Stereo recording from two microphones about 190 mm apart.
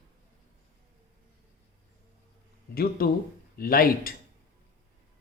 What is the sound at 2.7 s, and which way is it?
Speech, 55° left (ahead or behind).